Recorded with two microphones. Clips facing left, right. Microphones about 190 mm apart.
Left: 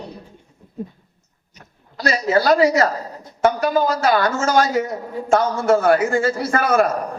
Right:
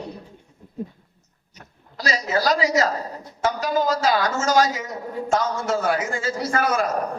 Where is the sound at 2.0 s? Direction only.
60° left (ahead or behind).